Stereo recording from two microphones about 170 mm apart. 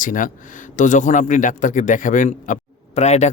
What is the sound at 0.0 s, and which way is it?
A man's voice, 50° left (ahead or behind).